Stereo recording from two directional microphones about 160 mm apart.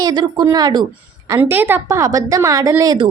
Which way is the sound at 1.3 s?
15° right (ahead or behind).